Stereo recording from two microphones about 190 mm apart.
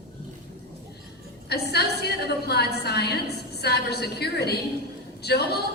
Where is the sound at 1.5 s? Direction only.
60° left (ahead or behind).